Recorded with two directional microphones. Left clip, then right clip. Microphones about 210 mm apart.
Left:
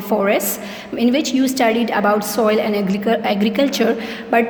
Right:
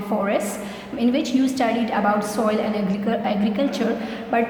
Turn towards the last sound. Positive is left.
turn(degrees=45)  # may be behind; listen again after turning